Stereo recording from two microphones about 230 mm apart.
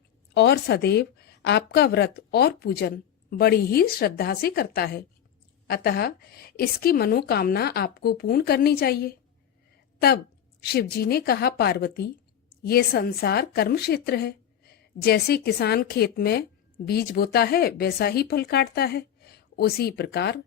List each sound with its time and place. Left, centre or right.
0.3 s a woman's voice: left
10.6 s a woman's voice: left